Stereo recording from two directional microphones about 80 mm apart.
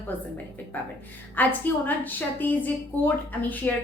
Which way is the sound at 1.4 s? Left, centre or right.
Left.